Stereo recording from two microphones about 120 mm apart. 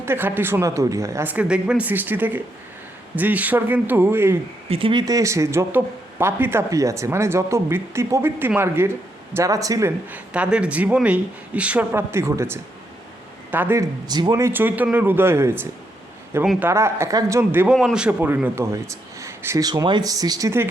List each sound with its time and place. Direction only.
0.0 s speech: 20° right (ahead or behind)
4.7 s speech: 45° right (ahead or behind)
5.0 s speech: 25° right (ahead or behind)
10.1 s speech: 10° right (ahead or behind)
14.1 s speech: 35° right (ahead or behind)
16.4 s speech: 10° right (ahead or behind)
16.6 s speech: 20° right (ahead or behind)
17.7 s speech: 5° right (ahead or behind)
18.2 s speech: 15° right (ahead or behind)
19.6 s speech: 35° right (ahead or behind)